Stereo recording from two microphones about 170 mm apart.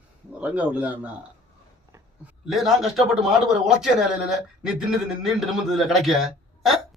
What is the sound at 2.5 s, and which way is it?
Speech, centre (ahead or behind).